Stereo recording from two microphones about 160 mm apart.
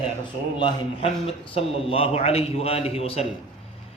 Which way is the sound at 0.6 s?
30° left (ahead or behind).